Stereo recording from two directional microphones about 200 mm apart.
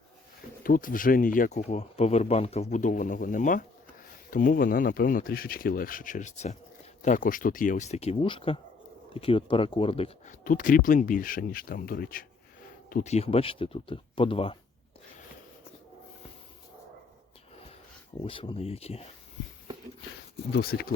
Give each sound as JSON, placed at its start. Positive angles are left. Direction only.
{"t": 0.6, "sound": "speech", "side_deg": 45}
{"t": 10.4, "sound": "speech", "side_deg": 40}
{"t": 12.9, "sound": "speech", "side_deg": 35}
{"t": 18.2, "sound": "speech", "side_deg": 25}
{"t": 20.5, "sound": "speech", "side_deg": 50}